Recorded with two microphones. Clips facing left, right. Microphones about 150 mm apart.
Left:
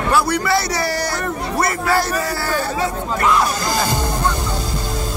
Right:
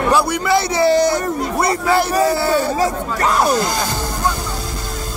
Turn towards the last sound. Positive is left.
turn(degrees=-35)  # may be behind; listen again after turning